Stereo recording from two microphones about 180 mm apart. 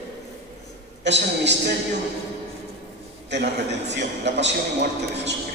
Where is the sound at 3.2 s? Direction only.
75° right (ahead or behind).